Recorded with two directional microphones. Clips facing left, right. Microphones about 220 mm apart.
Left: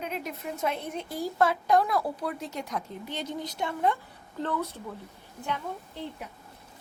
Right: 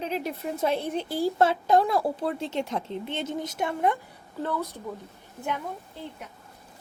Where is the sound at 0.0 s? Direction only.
30° right (ahead or behind).